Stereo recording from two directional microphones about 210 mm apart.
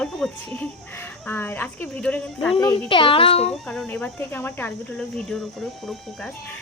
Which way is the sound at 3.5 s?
5° left (ahead or behind).